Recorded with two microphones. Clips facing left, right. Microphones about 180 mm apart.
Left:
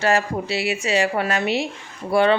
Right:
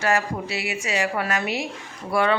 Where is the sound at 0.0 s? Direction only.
30° left (ahead or behind).